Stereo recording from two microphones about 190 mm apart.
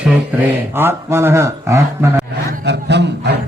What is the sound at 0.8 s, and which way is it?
Speech, 10° right (ahead or behind).